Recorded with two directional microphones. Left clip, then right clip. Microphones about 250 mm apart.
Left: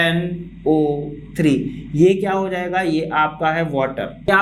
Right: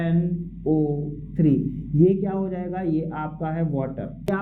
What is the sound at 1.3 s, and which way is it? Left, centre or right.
Speech, centre.